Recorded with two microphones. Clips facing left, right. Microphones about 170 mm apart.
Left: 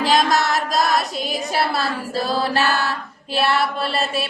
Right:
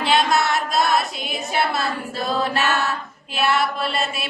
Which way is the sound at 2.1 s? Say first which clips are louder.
Left 3 dB; 35° left (ahead or behind).